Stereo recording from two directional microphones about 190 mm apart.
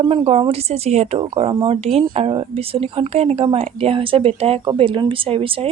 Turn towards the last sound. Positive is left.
turn(degrees=-30)  # may be behind; listen again after turning